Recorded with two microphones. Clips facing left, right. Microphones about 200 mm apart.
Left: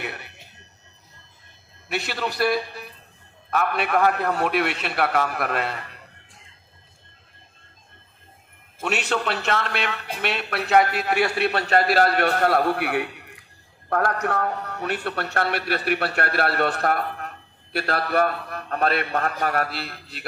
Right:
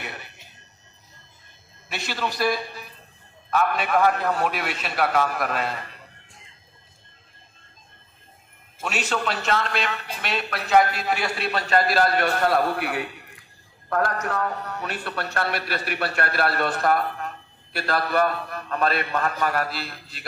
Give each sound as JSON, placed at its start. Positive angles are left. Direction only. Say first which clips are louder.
{"t": 0.0, "sound": "a sound", "louder": "left 3 dB", "side_deg": 60}
{"t": 1.9, "sound": "a man's voice", "louder": "left 2 dB", "side_deg": 60}
{"t": 8.8, "sound": "a man's voice", "louder": "left 2 dB", "side_deg": 60}